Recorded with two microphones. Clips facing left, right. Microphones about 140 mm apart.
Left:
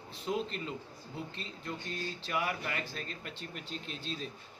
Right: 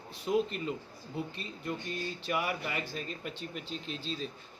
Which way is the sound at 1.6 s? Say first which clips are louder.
Right 3 dB; 10° right (ahead or behind).